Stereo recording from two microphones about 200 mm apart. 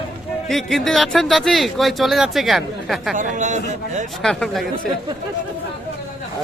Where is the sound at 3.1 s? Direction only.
40° right (ahead or behind).